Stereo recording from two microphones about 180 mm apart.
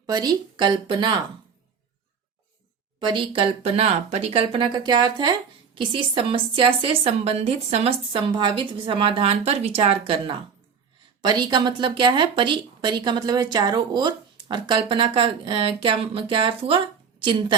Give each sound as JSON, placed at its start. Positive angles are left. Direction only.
{"t": 0.0, "sound": "speech", "side_deg": -20}
{"t": 3.0, "sound": "speech", "side_deg": -25}